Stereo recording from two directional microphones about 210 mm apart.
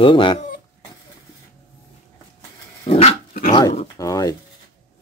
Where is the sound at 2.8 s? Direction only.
30° left (ahead or behind).